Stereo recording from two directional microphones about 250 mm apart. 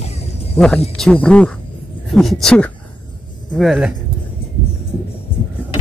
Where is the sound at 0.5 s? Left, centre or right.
Centre.